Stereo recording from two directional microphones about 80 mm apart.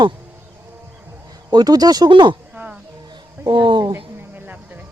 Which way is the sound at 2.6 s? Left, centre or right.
Centre.